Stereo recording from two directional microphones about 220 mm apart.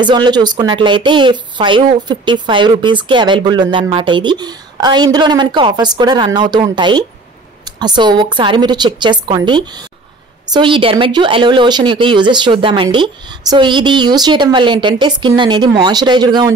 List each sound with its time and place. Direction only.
0.0 s speech: 20° right (ahead or behind)